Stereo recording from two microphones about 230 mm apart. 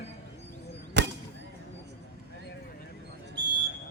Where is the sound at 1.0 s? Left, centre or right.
Right.